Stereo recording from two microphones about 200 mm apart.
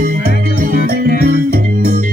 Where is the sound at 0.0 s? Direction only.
50° right (ahead or behind).